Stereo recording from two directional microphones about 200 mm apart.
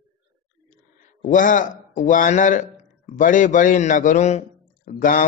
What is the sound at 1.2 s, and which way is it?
Speech, 40° left (ahead or behind).